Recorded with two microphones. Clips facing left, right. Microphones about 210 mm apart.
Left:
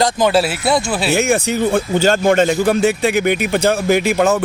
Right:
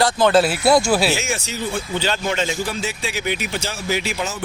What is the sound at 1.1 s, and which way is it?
Speech, 55° left (ahead or behind).